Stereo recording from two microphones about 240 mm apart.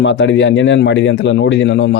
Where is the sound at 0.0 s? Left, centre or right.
Left.